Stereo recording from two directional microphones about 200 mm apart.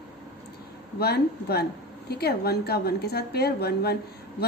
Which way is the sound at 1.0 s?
50° left (ahead or behind).